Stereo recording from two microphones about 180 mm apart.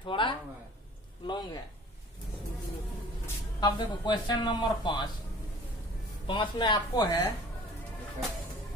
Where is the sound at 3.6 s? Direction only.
25° left (ahead or behind).